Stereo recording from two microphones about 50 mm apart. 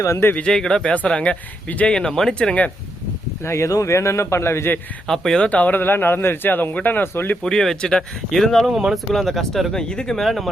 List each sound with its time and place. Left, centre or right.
0.4 s speech: centre
1.9 s speech: centre
3.4 s a man's voice: left
5.0 s speech: centre
5.4 s speech: left
5.7 s a man's voice: left
7.4 s speech: centre
8.7 s speech: centre
9.1 s speech: centre
10.2 s speech: centre